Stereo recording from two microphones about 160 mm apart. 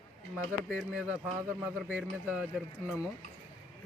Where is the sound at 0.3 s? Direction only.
5° right (ahead or behind).